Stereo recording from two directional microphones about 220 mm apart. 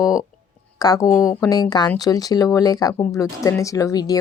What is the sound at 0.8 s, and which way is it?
Speech, 15° left (ahead or behind).